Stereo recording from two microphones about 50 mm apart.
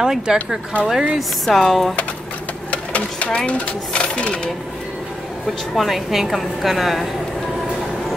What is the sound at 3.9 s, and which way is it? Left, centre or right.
Speech, left.